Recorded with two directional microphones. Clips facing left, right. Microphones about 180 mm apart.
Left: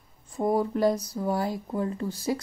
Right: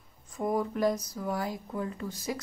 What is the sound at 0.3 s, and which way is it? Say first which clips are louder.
Speech: left 5 dB; 30° left (ahead or behind).